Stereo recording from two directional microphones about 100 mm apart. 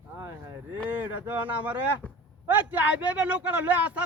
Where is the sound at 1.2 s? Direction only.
15° right (ahead or behind).